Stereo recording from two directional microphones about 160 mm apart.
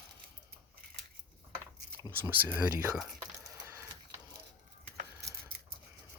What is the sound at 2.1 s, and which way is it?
Speech, 15° right (ahead or behind).